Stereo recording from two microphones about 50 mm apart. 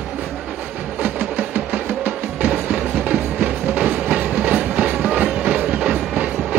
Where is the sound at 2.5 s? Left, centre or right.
Right.